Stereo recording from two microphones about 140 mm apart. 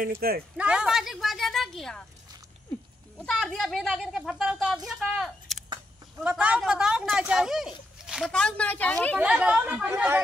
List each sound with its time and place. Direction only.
0.0 s speech: 90° right
0.6 s speech: 5° right (ahead or behind)
3.2 s speech: 5° left (ahead or behind)
9.2 s speech: 10° right (ahead or behind)